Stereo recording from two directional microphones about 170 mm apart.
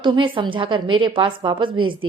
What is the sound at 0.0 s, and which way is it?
A woman's voice, 30° right (ahead or behind).